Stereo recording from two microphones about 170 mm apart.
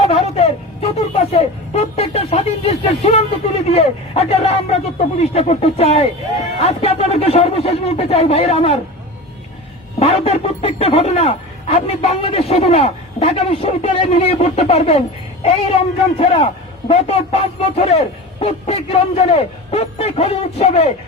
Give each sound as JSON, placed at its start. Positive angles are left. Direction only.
{"t": 0.0, "sound": "speech", "side_deg": 35}
{"t": 10.0, "sound": "speech", "side_deg": 35}